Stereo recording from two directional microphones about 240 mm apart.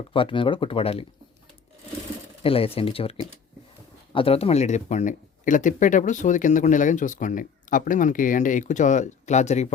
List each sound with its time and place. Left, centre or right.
0.1 s speech: left
2.4 s speech: left